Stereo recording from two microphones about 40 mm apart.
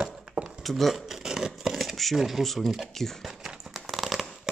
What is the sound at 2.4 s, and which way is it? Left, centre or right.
Speech, centre.